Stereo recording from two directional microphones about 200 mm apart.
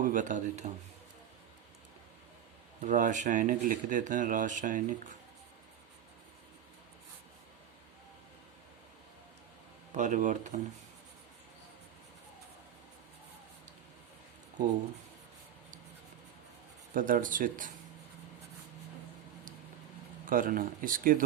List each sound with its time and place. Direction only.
0.0 s speech: 40° right (ahead or behind)
2.8 s speech: 40° right (ahead or behind)
9.9 s speech: 40° right (ahead or behind)
16.9 s speech: 40° right (ahead or behind)
20.2 s speech: 45° right (ahead or behind)